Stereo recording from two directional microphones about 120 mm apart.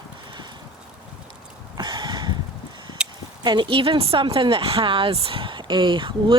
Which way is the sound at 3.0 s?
10° right (ahead or behind).